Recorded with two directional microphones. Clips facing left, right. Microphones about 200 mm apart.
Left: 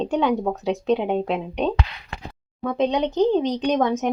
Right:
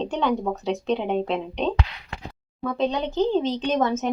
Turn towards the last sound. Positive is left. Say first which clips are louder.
# left 2 dB
turn(degrees=15)  # may be behind; listen again after turning